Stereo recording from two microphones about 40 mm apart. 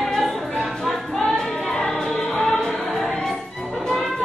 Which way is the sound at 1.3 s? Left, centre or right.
Centre.